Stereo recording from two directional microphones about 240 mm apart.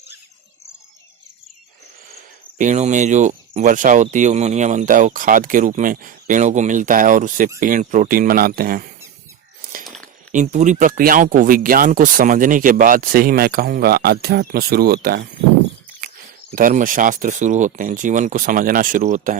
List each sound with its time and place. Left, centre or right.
2.6 s speech: right
9.8 s a sound: centre
10.3 s speech: right
16.6 s speech: right